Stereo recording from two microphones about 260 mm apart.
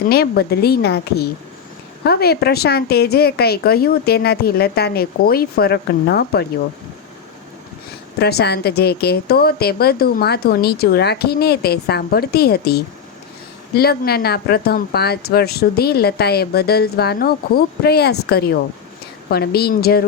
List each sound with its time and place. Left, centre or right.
0.1 s speech: left
8.2 s speech: left